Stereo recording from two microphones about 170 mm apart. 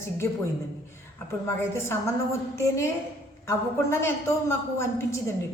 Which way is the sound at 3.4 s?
15° left (ahead or behind).